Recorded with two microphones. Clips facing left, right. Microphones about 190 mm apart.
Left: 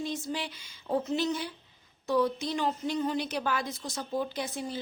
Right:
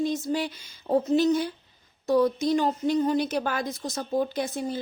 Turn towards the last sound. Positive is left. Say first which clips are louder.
# right 6 dB
turn(degrees=-45)  # may be behind; listen again after turning